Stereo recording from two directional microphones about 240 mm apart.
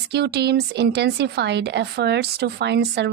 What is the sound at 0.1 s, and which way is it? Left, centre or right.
A woman's voice, right.